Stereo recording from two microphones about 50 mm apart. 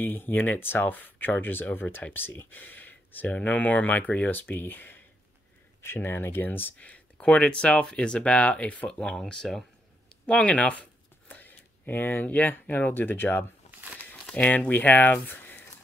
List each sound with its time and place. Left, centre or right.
0.0 s speech: left
6.8 s speech: left
8.8 s speech: centre
10.2 s speech: left
13.7 s a sound: right
14.3 s speech: left